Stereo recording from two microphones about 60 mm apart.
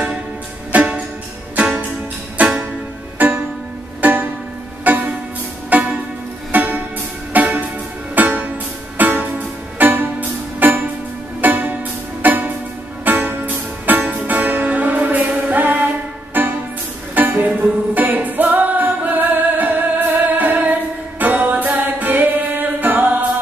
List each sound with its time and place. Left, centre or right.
0.7 s music: right